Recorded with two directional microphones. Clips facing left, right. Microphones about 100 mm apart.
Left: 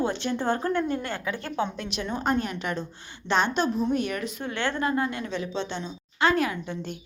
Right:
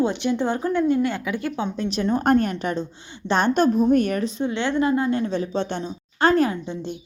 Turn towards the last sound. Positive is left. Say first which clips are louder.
# right 5 dB
turn(degrees=-35)  # may be behind; listen again after turning